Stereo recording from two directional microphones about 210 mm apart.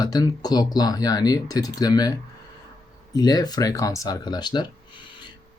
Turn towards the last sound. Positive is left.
turn(degrees=20)  # may be behind; listen again after turning